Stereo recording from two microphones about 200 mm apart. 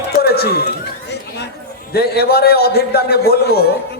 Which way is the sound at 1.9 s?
50° left (ahead or behind).